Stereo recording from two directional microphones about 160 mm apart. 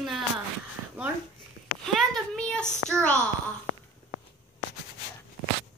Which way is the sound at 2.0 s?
5° left (ahead or behind).